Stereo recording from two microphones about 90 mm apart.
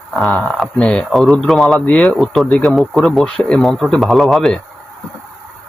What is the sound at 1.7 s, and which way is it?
Speech, 15° left (ahead or behind).